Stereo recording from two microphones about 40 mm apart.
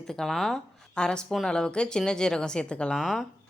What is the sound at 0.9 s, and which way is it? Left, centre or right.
Speech, centre.